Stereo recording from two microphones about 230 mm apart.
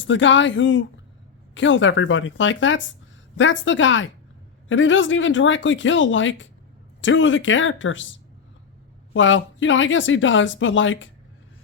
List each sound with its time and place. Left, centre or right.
0.0 s speech: left
9.1 s speech: left